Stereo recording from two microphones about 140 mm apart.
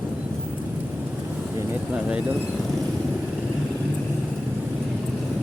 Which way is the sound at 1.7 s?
10° right (ahead or behind).